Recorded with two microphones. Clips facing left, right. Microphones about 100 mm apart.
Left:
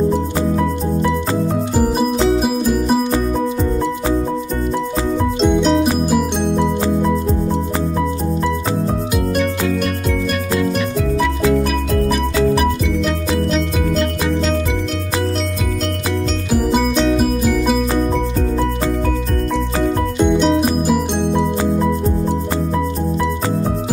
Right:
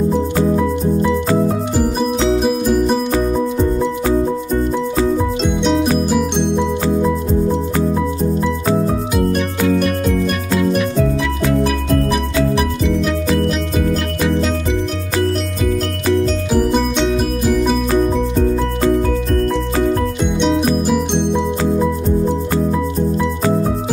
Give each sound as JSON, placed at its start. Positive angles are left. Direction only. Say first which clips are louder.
{"t": 1.8, "sound": "music", "louder": "left 2 dB", "side_deg": 5}
{"t": 5.4, "sound": "music", "louder": "left 5 dB", "side_deg": 0}
{"t": 20.3, "sound": "music", "louder": "even", "side_deg": 5}